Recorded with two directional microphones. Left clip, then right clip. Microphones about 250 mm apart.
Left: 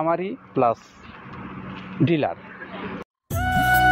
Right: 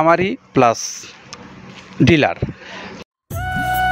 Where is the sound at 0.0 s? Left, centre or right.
Right.